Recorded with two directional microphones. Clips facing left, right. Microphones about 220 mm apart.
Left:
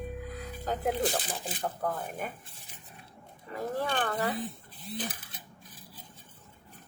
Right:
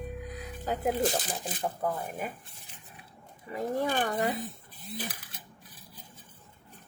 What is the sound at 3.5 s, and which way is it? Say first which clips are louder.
Zipper: right 2 dB; 10° right (ahead or behind).